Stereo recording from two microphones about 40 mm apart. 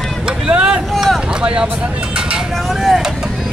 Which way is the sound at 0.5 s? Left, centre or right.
Right.